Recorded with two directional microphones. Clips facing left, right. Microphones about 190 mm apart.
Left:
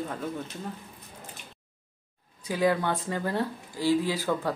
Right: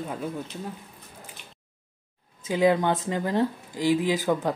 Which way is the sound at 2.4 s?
20° right (ahead or behind).